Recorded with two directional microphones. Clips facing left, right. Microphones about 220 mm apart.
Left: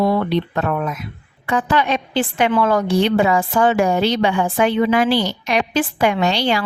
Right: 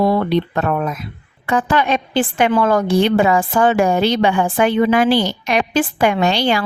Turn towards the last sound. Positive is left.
turn(degrees=-50)  # may be behind; listen again after turning